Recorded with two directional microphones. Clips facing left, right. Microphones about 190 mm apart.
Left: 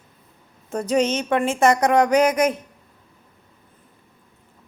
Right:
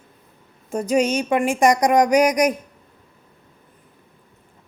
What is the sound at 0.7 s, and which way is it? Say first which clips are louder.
A woman's voice: right 1 dB; 10° right (ahead or behind).